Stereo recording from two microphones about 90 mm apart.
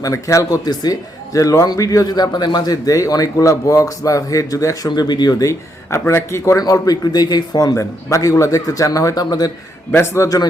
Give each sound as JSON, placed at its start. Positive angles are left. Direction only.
{"t": 0.0, "sound": "speech", "side_deg": 35}
{"t": 0.5, "sound": "a man's voice", "side_deg": 50}
{"t": 9.9, "sound": "a man's voice", "side_deg": 25}